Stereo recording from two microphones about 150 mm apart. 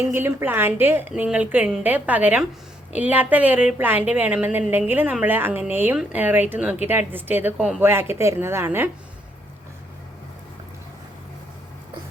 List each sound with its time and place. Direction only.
0.0 s a woman's voice: 15° right (ahead or behind)